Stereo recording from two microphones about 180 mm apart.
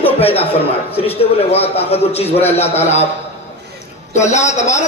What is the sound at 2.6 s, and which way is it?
Speech, 35° left (ahead or behind).